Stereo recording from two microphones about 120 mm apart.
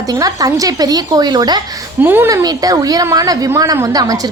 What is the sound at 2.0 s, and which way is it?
Speech, 15° right (ahead or behind).